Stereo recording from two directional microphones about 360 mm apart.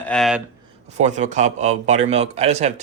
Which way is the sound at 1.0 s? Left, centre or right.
Centre.